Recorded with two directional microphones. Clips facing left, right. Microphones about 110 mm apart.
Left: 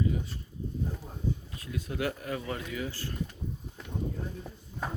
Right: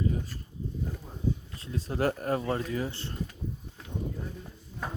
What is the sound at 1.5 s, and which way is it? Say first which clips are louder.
Speech: right 3 dB; 30° right (ahead or behind).